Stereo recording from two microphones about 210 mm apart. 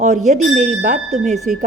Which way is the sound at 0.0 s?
35° right (ahead or behind).